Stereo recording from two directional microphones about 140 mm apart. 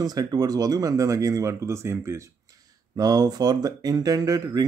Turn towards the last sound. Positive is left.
turn(degrees=-25)  # may be behind; listen again after turning